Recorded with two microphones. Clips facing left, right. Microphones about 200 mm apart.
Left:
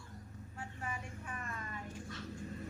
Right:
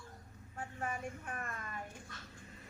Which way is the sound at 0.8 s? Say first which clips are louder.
Right 5 dB; 50° right (ahead or behind).